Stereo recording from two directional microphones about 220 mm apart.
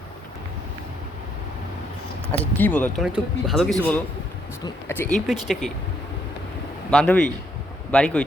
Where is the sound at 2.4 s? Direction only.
10° left (ahead or behind).